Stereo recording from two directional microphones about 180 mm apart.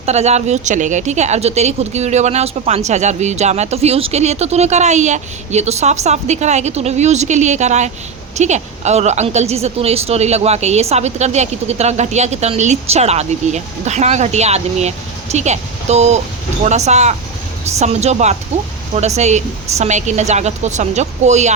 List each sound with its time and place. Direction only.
0.0 s a woman's voice: 35° right (ahead or behind)